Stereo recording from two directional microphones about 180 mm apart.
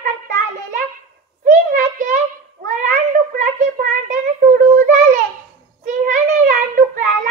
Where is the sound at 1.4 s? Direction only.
45° right (ahead or behind).